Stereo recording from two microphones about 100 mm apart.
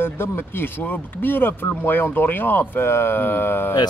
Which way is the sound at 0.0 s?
25° left (ahead or behind).